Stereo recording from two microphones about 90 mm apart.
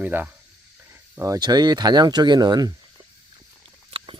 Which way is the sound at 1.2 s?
45° right (ahead or behind).